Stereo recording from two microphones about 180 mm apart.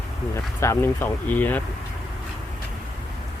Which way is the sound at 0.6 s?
15° left (ahead or behind).